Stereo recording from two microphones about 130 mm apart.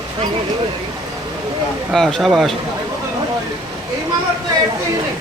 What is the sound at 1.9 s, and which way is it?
Speech, 5° left (ahead or behind).